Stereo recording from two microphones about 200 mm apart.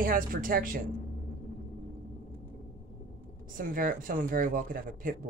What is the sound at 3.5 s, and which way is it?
Speech, 45° right (ahead or behind).